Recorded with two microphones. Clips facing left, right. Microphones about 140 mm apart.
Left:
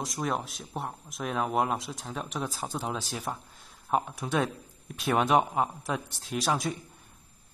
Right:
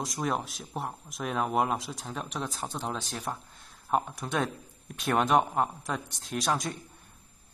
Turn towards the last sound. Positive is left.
turn(degrees=0)  # may be behind; listen again after turning